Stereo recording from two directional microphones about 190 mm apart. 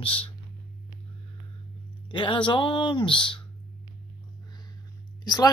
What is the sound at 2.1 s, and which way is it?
Speech, 25° left (ahead or behind).